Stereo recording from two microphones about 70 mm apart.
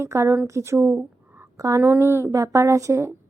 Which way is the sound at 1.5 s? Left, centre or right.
Right.